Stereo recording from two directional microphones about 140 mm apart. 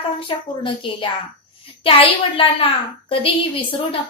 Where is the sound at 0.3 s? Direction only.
35° left (ahead or behind).